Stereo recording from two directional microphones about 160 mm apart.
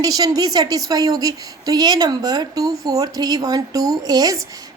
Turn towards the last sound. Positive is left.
turn(degrees=-25)  # may be behind; listen again after turning